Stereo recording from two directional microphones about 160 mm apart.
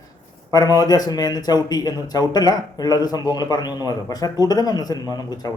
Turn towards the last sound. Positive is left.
turn(degrees=25)  # may be behind; listen again after turning